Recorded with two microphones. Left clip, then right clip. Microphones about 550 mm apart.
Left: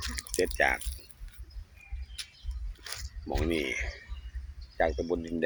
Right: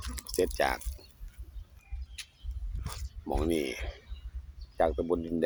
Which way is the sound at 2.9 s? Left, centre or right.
Right.